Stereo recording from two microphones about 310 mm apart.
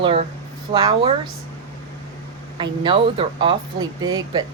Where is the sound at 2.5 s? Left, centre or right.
Centre.